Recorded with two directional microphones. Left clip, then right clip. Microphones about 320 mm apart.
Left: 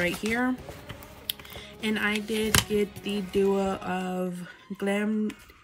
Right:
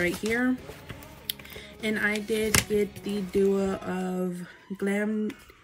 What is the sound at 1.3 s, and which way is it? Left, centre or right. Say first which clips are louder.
Speech: left 1 dB; centre.